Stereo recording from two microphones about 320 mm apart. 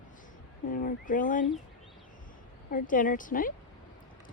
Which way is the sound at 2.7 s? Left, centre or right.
Left.